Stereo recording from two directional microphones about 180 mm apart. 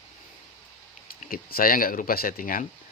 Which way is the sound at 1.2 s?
55° left (ahead or behind).